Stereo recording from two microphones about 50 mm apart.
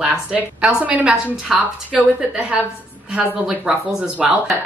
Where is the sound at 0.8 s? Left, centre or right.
Right.